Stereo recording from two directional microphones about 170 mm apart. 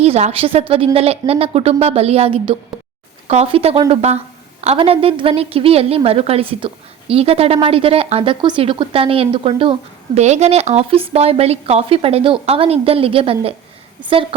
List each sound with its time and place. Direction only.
0.0 s a woman's voice: 40° right (ahead or behind)